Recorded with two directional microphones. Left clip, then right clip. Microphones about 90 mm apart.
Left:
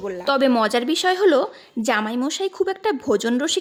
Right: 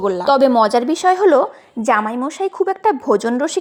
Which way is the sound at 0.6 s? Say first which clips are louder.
Right 5 dB; 5° right (ahead or behind).